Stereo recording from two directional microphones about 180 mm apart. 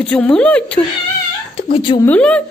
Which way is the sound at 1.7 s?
25° left (ahead or behind).